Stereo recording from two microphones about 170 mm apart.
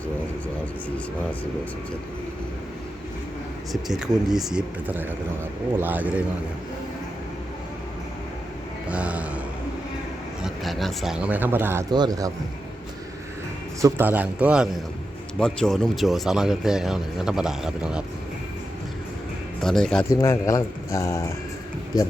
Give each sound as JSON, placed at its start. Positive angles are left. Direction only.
{"t": 3.7, "sound": "a man's voice", "side_deg": 0}
{"t": 8.9, "sound": "a sound", "side_deg": -5}
{"t": 10.4, "sound": "speech", "side_deg": 0}
{"t": 13.8, "sound": "a man's voice", "side_deg": -10}
{"t": 15.4, "sound": "speech", "side_deg": 5}
{"t": 19.6, "sound": "speech", "side_deg": 5}
{"t": 20.1, "sound": "speech", "side_deg": 20}